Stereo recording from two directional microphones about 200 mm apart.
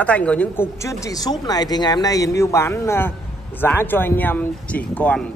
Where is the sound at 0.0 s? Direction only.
5° left (ahead or behind).